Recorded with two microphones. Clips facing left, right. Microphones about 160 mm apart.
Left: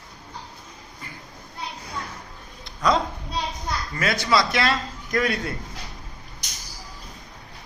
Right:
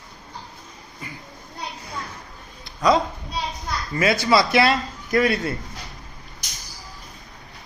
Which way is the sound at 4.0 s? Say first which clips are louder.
Right 4 dB; 10° right (ahead or behind).